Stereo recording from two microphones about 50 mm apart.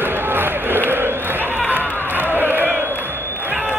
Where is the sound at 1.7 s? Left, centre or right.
Right.